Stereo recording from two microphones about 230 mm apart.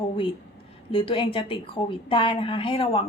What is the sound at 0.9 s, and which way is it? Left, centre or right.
A woman's voice, left.